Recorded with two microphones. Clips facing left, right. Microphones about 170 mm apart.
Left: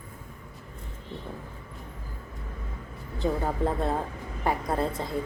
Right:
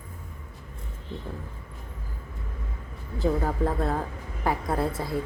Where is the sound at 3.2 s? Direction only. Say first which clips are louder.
Right 2 dB; centre (ahead or behind).